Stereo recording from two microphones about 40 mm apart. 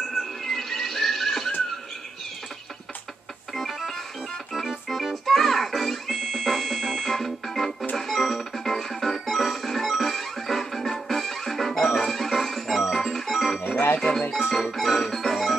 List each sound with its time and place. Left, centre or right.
0.5 s music: centre
3.5 s music: centre
4.6 s organ: centre
5.1 s music: centre
13.9 s music: centre
14.5 s music: centre